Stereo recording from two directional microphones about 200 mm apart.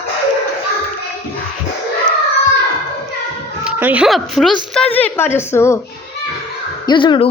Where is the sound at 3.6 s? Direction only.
5° right (ahead or behind); by 5.7 s 10° left (ahead or behind).